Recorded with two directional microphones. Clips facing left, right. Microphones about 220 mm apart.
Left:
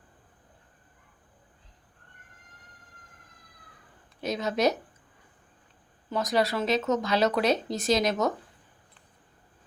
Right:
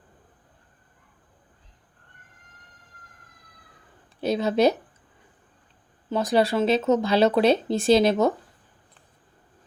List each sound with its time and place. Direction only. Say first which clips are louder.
4.2 s speech: right 6 dB; 30° right (ahead or behind)
6.1 s speech: right 5 dB; 30° right (ahead or behind)